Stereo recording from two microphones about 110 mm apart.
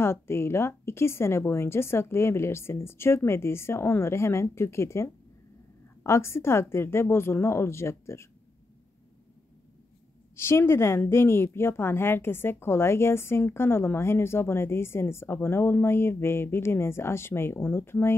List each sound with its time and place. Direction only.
0.0 s a woman's voice: 20° left (ahead or behind)
10.3 s a woman's voice: 25° left (ahead or behind)